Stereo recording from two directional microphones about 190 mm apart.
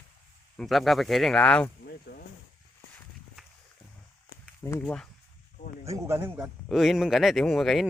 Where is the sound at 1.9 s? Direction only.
55° left (ahead or behind).